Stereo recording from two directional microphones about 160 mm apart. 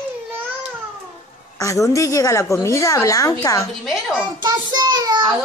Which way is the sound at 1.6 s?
20° left (ahead or behind).